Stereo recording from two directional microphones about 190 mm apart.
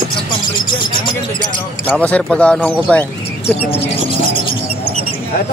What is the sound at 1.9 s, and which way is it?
Speech, 10° left (ahead or behind).